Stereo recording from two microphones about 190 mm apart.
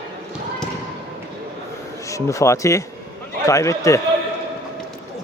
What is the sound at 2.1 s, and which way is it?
Speech, 15° left (ahead or behind).